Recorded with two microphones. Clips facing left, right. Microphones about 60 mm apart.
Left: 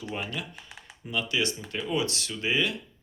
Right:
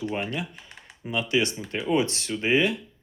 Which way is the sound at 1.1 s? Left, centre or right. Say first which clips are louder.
Right 4 dB; right.